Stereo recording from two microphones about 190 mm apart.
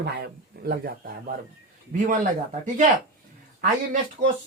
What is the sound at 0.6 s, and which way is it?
Speech, 55° right (ahead or behind).